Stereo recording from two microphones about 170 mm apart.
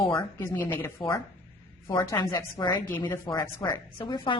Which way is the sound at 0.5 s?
10° left (ahead or behind).